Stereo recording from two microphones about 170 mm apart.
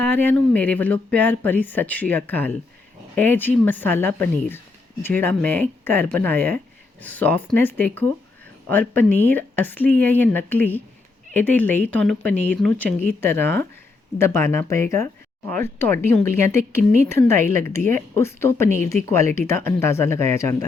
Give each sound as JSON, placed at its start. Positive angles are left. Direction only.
{"t": 0.0, "sound": "speech", "side_deg": 10}